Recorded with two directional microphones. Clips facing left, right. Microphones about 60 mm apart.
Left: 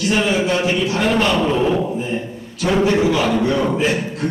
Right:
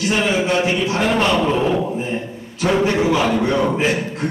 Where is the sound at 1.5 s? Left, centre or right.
Centre.